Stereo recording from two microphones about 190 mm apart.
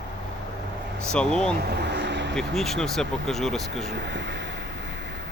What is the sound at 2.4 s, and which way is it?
Speech, centre (ahead or behind).